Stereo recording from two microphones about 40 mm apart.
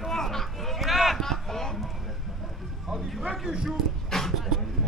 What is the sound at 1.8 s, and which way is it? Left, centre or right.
Music, centre.